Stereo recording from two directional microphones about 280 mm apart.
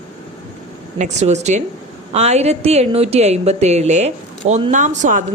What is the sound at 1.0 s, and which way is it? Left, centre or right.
A woman's voice, right.